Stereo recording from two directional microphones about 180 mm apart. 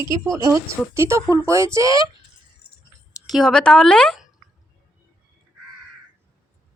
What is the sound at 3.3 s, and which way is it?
Speech, centre (ahead or behind).